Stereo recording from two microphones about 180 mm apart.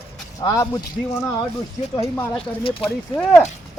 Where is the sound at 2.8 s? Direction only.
10° left (ahead or behind).